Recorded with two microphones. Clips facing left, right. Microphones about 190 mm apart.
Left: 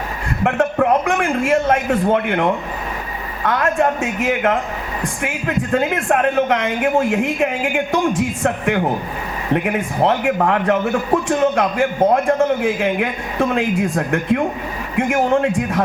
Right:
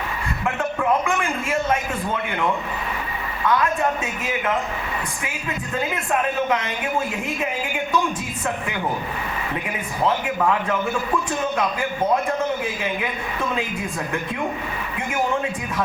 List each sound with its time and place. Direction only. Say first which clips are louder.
0.6 s a man's voice: left 6 dB; 60° left (ahead or behind)
14.9 s a man's voice: left 8 dB; 70° left (ahead or behind)